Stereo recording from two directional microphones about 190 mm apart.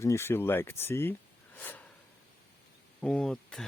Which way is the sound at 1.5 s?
10° left (ahead or behind).